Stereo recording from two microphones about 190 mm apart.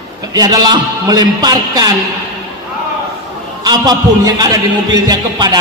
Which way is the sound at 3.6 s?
20° right (ahead or behind).